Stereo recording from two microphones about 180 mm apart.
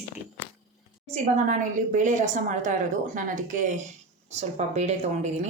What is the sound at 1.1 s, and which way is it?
A woman's voice, 45° right (ahead or behind).